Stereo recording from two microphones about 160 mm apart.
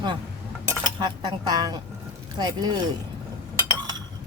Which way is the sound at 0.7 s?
25° right (ahead or behind).